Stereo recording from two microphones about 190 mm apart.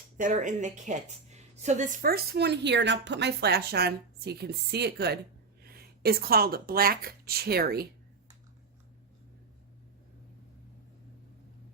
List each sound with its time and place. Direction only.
0.2 s a woman's voice: 40° right (ahead or behind)